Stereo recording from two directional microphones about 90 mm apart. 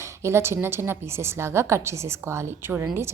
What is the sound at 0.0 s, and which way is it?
A woman's voice, 30° right (ahead or behind).